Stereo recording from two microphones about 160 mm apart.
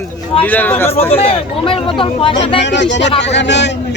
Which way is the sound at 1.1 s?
35° left (ahead or behind).